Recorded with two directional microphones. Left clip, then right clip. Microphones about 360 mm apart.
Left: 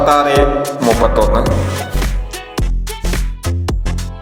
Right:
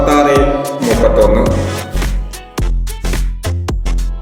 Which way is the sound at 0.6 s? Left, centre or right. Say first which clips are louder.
Even; centre.